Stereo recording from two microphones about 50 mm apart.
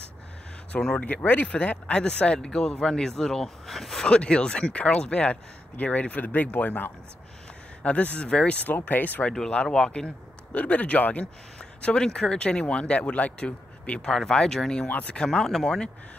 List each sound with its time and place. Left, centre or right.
0.7 s speech: centre
1.0 s speech: left; by 4.0 s centre
4.0 s speech: left
8.6 s speech: left
9.5 s speech: centre
11.8 s speech: centre
14.9 s speech: left
15.3 s speech: centre